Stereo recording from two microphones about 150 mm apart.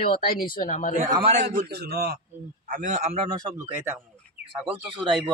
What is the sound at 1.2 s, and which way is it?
Speech, 50° right (ahead or behind).